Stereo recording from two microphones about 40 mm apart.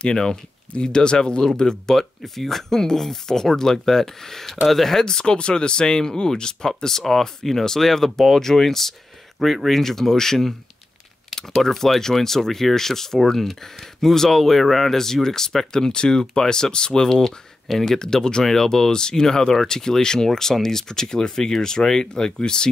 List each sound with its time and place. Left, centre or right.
0.0 s speech: centre
2.0 s speech: centre
5.0 s speech: centre